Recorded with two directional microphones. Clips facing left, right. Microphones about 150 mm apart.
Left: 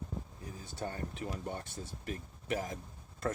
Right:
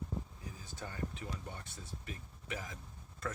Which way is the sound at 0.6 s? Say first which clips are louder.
Left 4 dB; 35° left (ahead or behind).